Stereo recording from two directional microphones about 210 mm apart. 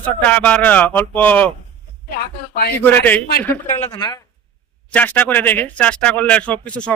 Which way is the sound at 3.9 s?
20° left (ahead or behind).